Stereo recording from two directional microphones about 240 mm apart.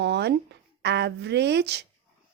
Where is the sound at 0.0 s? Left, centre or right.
Right.